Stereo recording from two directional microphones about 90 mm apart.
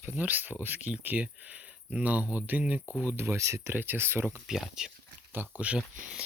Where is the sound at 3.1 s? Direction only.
30° right (ahead or behind).